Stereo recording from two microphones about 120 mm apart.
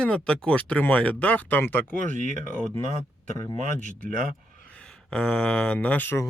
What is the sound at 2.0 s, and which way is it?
Speech, 90° right.